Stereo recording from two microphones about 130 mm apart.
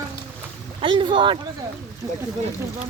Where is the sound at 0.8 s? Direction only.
40° right (ahead or behind).